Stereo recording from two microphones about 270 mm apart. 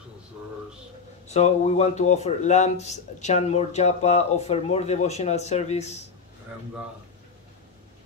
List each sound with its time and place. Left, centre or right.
1.3 s a man's voice: left